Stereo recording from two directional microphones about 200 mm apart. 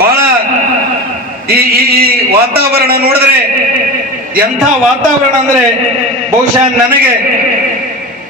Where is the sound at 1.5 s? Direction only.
50° right (ahead or behind).